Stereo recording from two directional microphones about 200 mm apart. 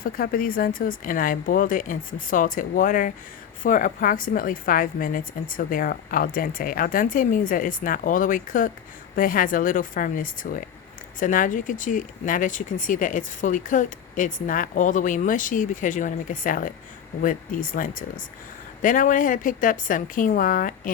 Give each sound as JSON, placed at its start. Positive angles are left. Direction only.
{"t": 0.0, "sound": "a woman's voice", "side_deg": 45}